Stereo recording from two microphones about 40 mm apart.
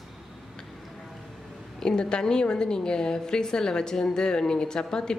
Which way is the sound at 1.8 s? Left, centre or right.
Centre.